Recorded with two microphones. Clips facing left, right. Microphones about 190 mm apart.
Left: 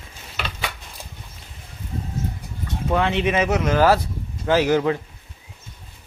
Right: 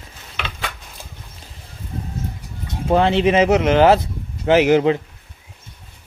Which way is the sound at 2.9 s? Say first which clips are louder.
Right 5 dB; 30° right (ahead or behind).